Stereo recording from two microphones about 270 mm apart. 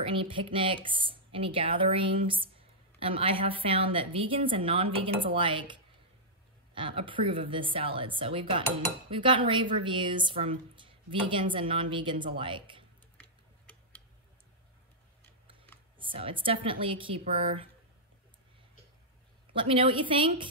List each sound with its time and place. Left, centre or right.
0.0 s a woman's voice: centre
13.2 s tick-tock: centre
16.0 s a woman's voice: centre
19.5 s a woman's voice: centre